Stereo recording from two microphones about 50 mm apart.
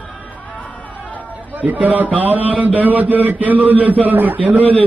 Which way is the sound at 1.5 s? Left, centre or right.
Right.